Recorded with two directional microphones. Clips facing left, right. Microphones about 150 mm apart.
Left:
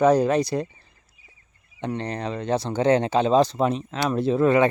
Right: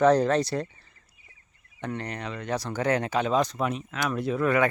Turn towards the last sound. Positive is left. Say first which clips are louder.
# left 6 dB
turn(degrees=25)  # may be behind; listen again after turning